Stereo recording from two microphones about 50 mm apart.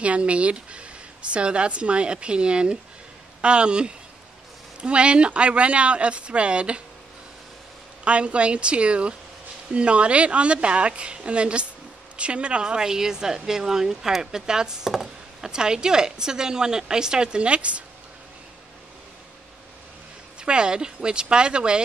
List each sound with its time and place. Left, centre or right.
0.0 s speech: right
8.0 s a woman's voice: right
20.3 s speech: centre